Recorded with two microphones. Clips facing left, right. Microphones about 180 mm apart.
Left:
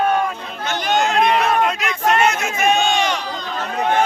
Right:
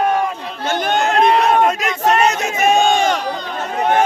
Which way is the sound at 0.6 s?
50° right (ahead or behind).